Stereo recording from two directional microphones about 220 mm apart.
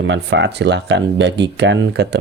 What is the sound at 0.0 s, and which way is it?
Speech, 55° right (ahead or behind).